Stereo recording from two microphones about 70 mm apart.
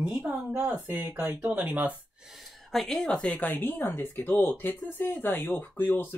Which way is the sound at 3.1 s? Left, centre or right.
Left.